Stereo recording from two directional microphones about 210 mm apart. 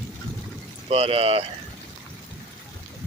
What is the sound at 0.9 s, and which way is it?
Speech, 30° right (ahead or behind).